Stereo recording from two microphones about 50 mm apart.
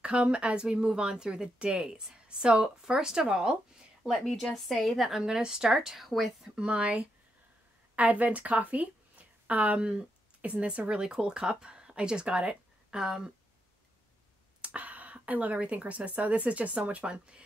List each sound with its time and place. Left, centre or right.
0.0 s a woman's voice: right; by 5.2 s centre
5.2 s a woman's voice: centre
6.5 s a woman's voice: right
14.6 s a woman's voice: right